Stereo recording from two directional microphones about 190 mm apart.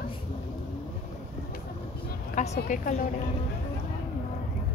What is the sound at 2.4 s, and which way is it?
Speech, 40° left (ahead or behind).